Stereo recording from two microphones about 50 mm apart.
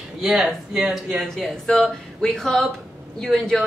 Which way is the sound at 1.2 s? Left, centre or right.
Centre.